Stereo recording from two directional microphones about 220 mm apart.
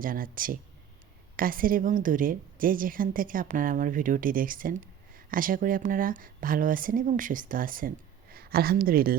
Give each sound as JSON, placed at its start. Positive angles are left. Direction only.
{"t": 0.0, "sound": "a woman's voice", "side_deg": -40}